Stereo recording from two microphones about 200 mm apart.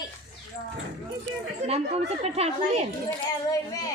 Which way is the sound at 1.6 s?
30° right (ahead or behind).